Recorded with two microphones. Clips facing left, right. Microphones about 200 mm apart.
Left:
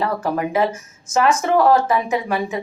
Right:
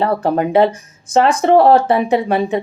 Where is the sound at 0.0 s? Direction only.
35° right (ahead or behind).